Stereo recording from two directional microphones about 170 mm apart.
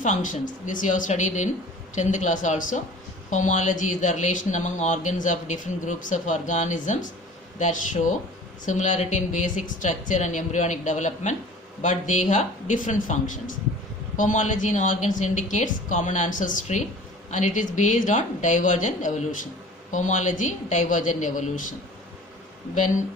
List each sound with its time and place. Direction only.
0.0 s speech: 45° left (ahead or behind)
8.6 s speech: 45° left (ahead or behind)